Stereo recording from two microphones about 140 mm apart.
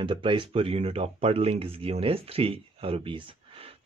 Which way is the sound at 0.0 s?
35° right (ahead or behind).